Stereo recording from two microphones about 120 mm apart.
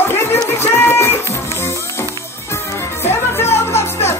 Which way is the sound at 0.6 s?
20° left (ahead or behind).